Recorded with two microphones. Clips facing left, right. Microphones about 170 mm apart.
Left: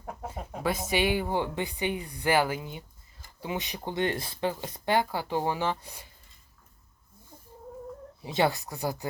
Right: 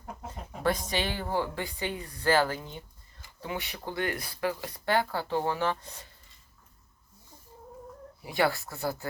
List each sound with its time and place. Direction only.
0.6 s a woman's voice: 5° left (ahead or behind)
8.2 s a woman's voice: 20° left (ahead or behind)